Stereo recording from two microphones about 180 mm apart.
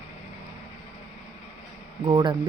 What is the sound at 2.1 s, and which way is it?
Speech, 25° right (ahead or behind).